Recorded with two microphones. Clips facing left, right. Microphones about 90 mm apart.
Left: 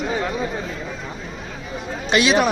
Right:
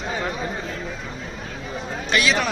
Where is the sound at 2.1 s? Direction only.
20° left (ahead or behind).